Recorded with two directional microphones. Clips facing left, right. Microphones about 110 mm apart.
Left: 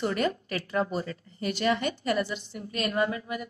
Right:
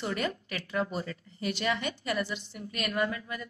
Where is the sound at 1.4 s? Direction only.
45° left (ahead or behind).